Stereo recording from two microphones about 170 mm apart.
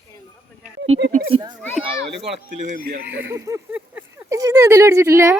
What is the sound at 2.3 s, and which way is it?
Speech, 45° right (ahead or behind).